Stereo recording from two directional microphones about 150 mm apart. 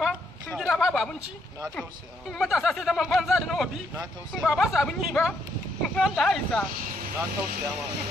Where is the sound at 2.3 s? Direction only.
Centre (ahead or behind).